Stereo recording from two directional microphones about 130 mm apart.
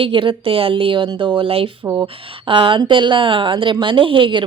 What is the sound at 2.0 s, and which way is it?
A woman's voice, 45° right (ahead or behind).